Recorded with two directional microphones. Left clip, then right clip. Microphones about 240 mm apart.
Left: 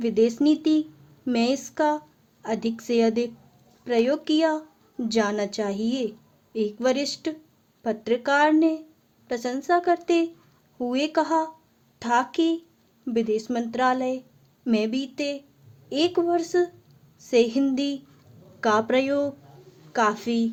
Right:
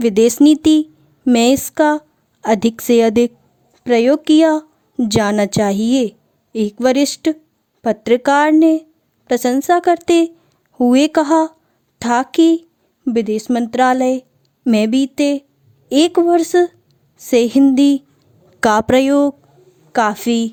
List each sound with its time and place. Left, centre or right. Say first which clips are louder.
0.0 s a woman's voice: right 10 dB; right